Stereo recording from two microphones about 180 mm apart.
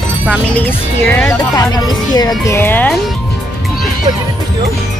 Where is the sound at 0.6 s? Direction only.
10° left (ahead or behind).